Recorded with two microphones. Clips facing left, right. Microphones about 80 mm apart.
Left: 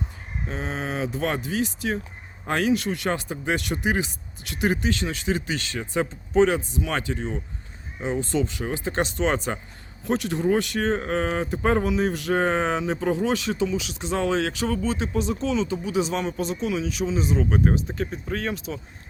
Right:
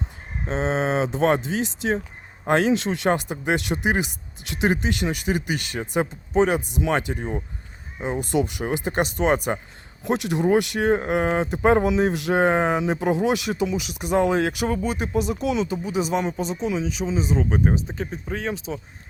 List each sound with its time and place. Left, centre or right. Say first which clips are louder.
0.4 s speech: right 7 dB; right; by 18.8 s centre